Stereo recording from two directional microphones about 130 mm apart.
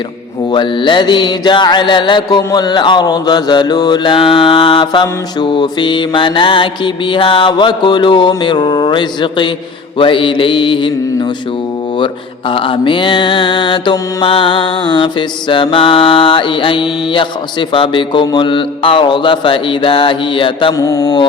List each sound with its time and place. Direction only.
0.5 s mantra: 40° left (ahead or behind)
11.9 s mantra: 40° left (ahead or behind)
20.7 s mantra: 25° left (ahead or behind)